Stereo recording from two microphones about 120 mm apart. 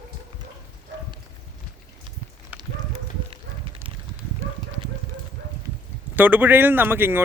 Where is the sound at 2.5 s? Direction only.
15° right (ahead or behind).